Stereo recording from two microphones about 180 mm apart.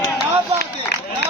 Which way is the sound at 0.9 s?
70° left (ahead or behind).